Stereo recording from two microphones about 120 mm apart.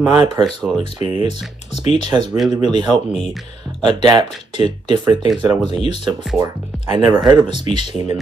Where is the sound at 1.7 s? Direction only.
65° left (ahead or behind).